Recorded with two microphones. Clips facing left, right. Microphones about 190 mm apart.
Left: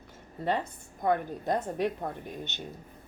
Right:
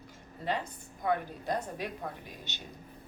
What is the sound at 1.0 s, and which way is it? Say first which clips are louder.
Speech: left 4 dB; 50° left (ahead or behind).